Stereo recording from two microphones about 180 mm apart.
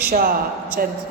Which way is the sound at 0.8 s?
55° right (ahead or behind).